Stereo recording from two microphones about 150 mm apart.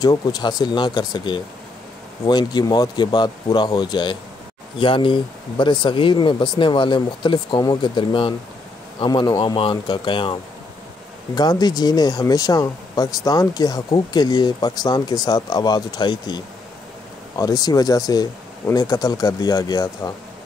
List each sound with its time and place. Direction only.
0.0 s speech: 25° left (ahead or behind)
11.3 s speech: 25° left (ahead or behind)